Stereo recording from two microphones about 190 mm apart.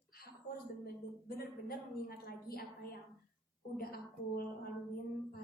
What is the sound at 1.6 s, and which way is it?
A man's voice, 55° left (ahead or behind).